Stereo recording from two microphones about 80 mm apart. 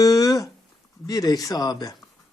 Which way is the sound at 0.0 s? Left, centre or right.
Left.